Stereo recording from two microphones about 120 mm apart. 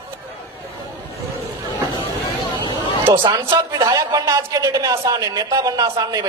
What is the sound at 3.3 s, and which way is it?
Speech, 25° right (ahead or behind).